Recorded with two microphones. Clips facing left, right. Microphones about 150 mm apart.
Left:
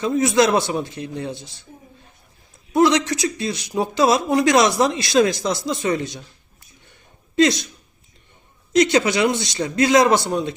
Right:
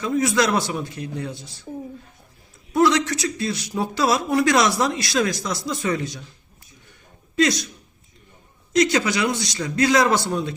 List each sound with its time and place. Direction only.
0.0 s a man's voice: 25° left (ahead or behind)
2.7 s a man's voice: 20° left (ahead or behind)
7.3 s a man's voice: 25° left (ahead or behind)
8.7 s a man's voice: 25° left (ahead or behind)